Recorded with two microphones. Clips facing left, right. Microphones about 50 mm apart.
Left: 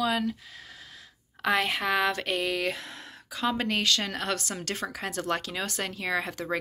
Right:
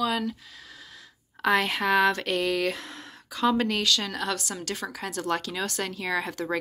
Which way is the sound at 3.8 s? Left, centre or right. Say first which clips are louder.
Right 1 dB; left.